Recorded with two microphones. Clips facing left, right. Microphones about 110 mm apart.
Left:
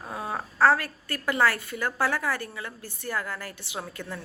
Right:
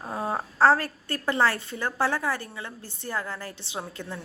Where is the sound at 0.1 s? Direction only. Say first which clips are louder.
Right 3 dB; 30° right (ahead or behind).